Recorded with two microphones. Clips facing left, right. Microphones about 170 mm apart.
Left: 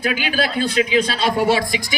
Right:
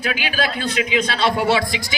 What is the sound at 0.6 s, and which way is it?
Speech, 30° left (ahead or behind).